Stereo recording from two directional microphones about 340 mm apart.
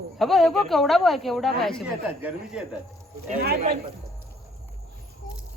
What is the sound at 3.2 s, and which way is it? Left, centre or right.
Speech, right.